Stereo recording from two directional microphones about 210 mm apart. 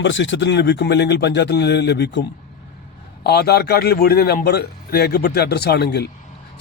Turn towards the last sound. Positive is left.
turn(degrees=50)  # may be behind; listen again after turning